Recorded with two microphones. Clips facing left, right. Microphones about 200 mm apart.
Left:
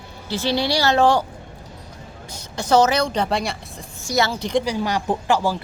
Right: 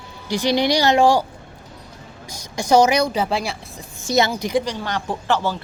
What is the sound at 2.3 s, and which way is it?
Speech, 10° right (ahead or behind).